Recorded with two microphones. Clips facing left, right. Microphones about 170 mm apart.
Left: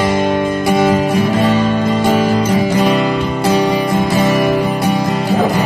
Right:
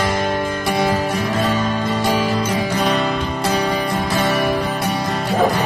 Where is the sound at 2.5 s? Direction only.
10° left (ahead or behind).